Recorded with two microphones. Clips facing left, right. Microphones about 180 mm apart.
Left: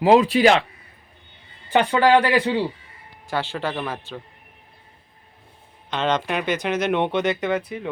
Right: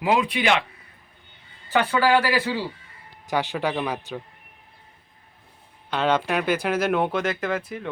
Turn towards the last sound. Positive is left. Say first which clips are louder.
# left 3 dB
turn(degrees=0)  # may be behind; listen again after turning